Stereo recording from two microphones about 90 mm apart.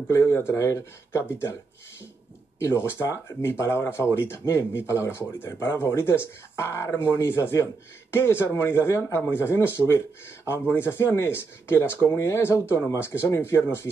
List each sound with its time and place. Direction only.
0.1 s speech: 25° left (ahead or behind)
2.6 s speech: 30° left (ahead or behind)